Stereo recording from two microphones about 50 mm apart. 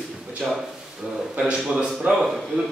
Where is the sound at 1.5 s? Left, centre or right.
Centre.